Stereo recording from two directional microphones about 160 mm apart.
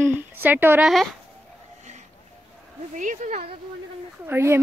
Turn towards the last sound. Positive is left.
turn(degrees=-15)  # may be behind; listen again after turning